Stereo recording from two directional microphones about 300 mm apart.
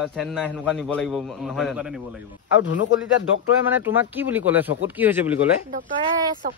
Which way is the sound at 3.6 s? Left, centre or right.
Centre.